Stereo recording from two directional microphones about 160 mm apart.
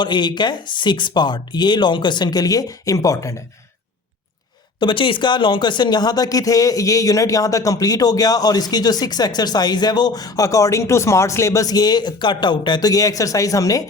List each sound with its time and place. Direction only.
0.0 s speech: 30° left (ahead or behind)
4.8 s speech: 30° left (ahead or behind)